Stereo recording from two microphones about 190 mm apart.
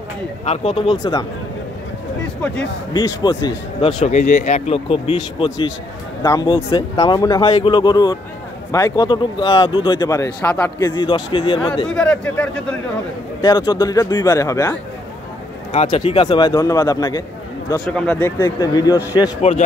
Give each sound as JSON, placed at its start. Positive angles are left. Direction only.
{"t": 0.5, "sound": "speech", "side_deg": 30}
{"t": 0.9, "sound": "speech", "side_deg": 20}
{"t": 2.9, "sound": "speech", "side_deg": 20}
{"t": 3.4, "sound": "speech", "side_deg": 35}
{"t": 11.9, "sound": "a man's voice", "side_deg": 5}
{"t": 13.4, "sound": "speech", "side_deg": 20}
{"t": 15.7, "sound": "speech", "side_deg": 30}
{"t": 17.8, "sound": "speech", "side_deg": 5}